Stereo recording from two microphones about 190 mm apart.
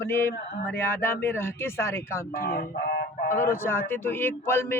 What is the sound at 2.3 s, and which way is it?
Speech, 45° left (ahead or behind).